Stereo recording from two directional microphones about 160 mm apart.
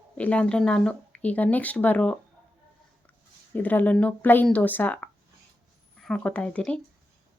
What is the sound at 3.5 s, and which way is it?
Speech, 10° left (ahead or behind).